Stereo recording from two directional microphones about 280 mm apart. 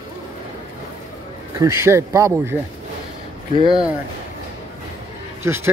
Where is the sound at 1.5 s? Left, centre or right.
Centre.